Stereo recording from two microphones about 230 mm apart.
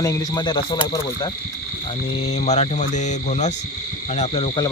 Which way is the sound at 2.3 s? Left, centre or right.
Left.